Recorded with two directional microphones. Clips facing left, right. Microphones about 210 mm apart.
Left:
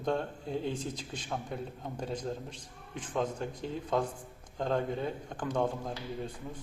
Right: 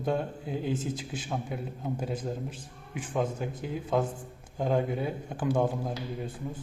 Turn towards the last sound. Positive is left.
turn(degrees=-5)  # may be behind; listen again after turning